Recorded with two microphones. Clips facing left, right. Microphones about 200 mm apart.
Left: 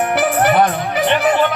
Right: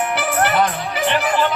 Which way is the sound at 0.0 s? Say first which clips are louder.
Left 4 dB; 55° left (ahead or behind).